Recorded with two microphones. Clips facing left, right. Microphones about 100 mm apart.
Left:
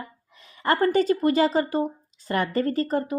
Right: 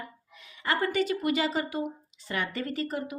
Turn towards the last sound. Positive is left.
turn(degrees=40)  # may be behind; listen again after turning